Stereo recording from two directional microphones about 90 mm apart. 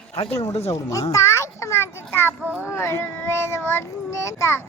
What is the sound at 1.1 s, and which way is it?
A child's voice, 30° left (ahead or behind).